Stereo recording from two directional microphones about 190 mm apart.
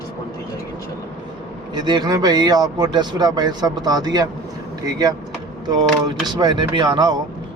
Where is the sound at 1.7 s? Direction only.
20° right (ahead or behind).